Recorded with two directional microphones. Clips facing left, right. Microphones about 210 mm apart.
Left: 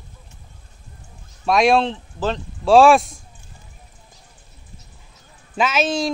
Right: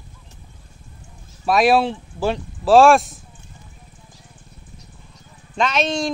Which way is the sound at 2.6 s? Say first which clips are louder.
Even; centre (ahead or behind).